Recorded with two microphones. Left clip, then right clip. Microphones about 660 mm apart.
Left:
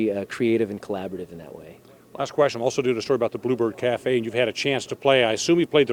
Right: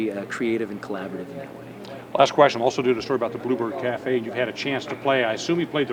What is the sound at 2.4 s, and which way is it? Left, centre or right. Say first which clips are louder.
Speech: right 3 dB; left.